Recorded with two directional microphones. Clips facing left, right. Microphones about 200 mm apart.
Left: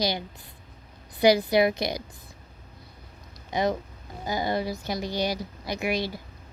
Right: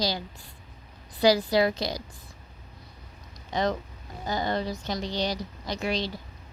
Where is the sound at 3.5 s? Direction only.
10° left (ahead or behind).